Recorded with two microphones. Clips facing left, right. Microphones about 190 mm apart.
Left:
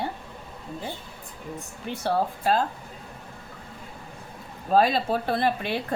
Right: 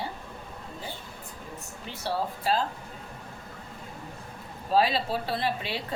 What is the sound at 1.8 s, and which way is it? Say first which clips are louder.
Speech: left 5 dB; 55° left (ahead or behind).